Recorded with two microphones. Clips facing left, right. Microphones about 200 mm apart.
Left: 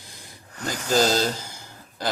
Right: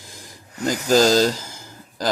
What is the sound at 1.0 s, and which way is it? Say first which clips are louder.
Speech: right 5 dB; 90° right.